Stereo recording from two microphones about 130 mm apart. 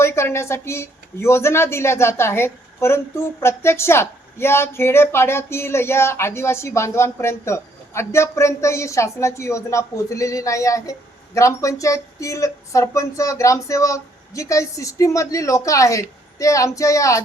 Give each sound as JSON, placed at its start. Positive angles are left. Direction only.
{"t": 0.0, "sound": "speech", "side_deg": 20}